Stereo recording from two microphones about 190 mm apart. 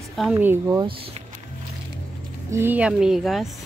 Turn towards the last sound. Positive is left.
turn(degrees=0)  # may be behind; listen again after turning